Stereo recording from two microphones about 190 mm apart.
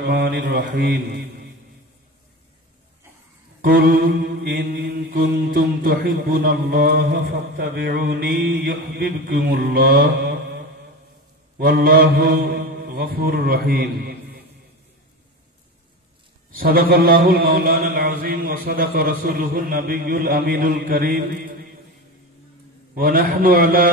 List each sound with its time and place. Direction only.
0.0 s a man's voice: 55° right (ahead or behind)
3.6 s mantra: 50° right (ahead or behind)
16.5 s mantra: 50° right (ahead or behind)
22.9 s mantra: 50° right (ahead or behind)